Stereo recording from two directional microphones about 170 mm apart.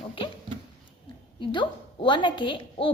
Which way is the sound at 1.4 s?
30° left (ahead or behind).